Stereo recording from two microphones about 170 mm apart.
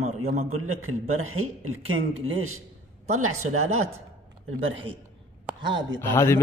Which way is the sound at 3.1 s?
45° right (ahead or behind).